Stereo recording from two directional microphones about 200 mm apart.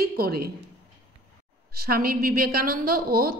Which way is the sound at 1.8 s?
50° right (ahead or behind).